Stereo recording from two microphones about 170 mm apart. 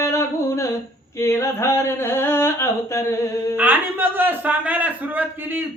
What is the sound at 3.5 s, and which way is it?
Speech, 10° right (ahead or behind).